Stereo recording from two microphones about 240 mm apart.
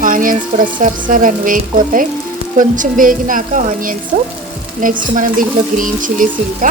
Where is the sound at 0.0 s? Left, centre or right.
Right.